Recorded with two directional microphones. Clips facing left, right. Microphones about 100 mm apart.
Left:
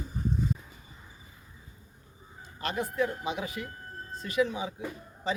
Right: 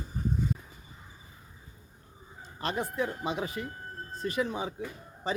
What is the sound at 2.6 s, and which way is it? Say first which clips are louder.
Speech: left 1 dB; 30° right (ahead or behind).